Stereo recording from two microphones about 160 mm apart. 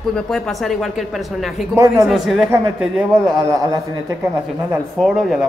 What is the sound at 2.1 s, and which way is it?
Speech, centre (ahead or behind).